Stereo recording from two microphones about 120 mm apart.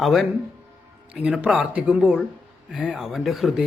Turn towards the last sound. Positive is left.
turn(degrees=0)  # may be behind; listen again after turning